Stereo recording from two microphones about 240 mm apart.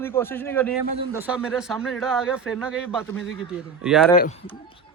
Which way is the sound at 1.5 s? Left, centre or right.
Centre.